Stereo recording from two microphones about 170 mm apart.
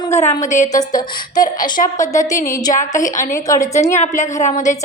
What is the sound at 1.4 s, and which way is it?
Speech, 50° left (ahead or behind).